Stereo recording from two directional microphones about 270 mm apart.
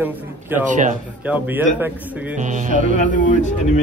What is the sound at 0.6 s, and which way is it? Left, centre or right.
Speech, right.